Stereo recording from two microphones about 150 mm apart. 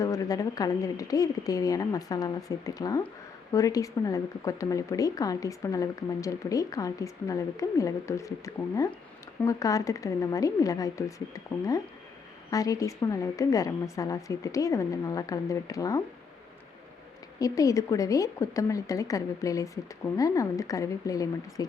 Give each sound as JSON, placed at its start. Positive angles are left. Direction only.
{"t": 0.0, "sound": "speech", "side_deg": 20}
{"t": 17.4, "sound": "speech", "side_deg": 25}